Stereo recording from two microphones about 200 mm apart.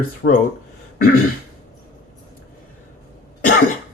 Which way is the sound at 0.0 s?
45° left (ahead or behind).